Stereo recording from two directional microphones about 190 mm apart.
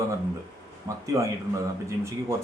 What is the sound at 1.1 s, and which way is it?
Speech, 15° right (ahead or behind).